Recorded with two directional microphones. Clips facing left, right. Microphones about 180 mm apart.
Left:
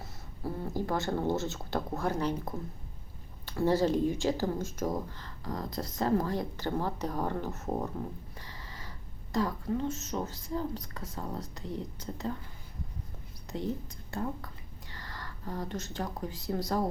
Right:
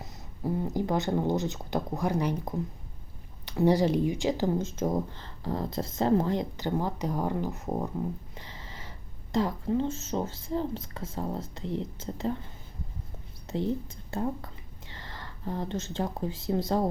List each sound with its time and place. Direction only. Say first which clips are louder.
0.0 s speech: right 4 dB; 15° right (ahead or behind)
8.4 s a sound: right 2 dB; 20° right (ahead or behind)
9.3 s speech: right 4 dB; 25° right (ahead or behind)
14.1 s speech: right 4 dB; 25° right (ahead or behind)